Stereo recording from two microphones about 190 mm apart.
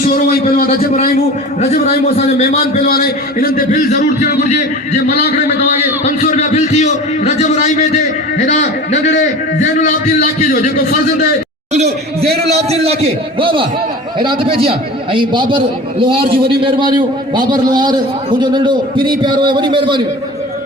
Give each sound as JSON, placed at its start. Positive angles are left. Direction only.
{"t": 0.1, "sound": "a man's voice", "side_deg": 50}
{"t": 2.1, "sound": "a man's voice", "side_deg": 35}
{"t": 2.7, "sound": "a man's voice", "side_deg": 50}
{"t": 6.3, "sound": "a man's voice", "side_deg": 35}
{"t": 12.5, "sound": "a man's voice", "side_deg": -35}